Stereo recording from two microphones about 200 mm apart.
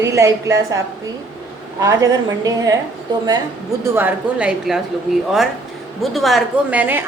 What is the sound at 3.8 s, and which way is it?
Speech, 10° right (ahead or behind).